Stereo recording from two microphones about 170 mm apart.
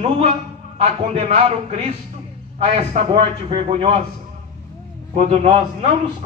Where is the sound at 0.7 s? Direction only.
35° right (ahead or behind).